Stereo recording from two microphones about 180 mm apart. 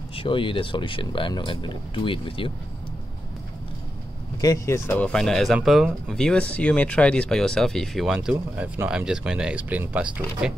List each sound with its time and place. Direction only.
0.1 s speech: 30° left (ahead or behind)
4.4 s speech: 15° left (ahead or behind); by 10.5 s 5° right (ahead or behind)